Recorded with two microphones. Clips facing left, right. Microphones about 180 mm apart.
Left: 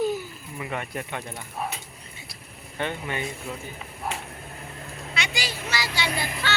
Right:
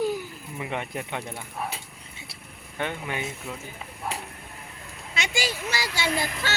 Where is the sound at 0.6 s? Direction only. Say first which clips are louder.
Even; 15° right (ahead or behind).